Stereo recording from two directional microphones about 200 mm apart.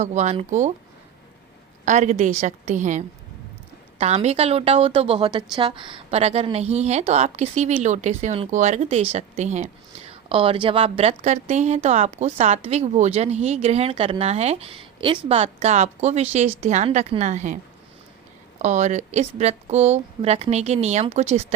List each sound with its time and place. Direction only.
0.0 s a woman's voice: 35° right (ahead or behind)
1.8 s a woman's voice: 40° right (ahead or behind)
4.0 s a woman's voice: 35° right (ahead or behind)
18.6 s a woman's voice: 35° right (ahead or behind)